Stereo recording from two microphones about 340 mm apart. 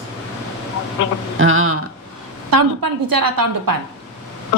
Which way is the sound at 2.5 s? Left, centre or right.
Right.